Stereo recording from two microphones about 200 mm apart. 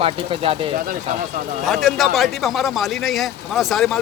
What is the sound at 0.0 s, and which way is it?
Speech, 30° right (ahead or behind).